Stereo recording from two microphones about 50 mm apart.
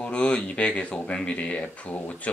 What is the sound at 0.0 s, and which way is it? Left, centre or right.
Speech, left.